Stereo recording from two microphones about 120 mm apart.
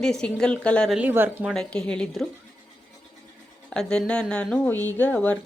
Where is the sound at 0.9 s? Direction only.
10° right (ahead or behind).